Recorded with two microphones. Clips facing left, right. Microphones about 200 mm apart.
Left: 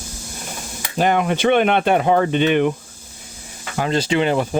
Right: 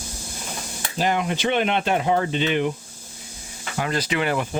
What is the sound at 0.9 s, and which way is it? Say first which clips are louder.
Speech: left 5 dB; 55° left (ahead or behind).